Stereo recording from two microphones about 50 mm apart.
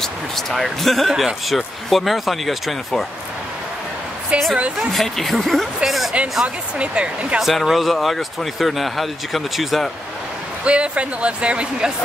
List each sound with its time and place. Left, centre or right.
0.0 s speech: centre
4.3 s speech: right
4.9 s speech: centre
6.4 s speech: right
7.4 s speech: centre
10.6 s speech: right